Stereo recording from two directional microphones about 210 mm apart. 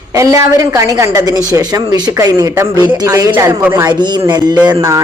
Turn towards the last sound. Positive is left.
turn(degrees=-15)  # may be behind; listen again after turning